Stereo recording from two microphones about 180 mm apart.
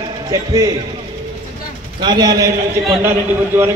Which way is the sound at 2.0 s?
25° right (ahead or behind).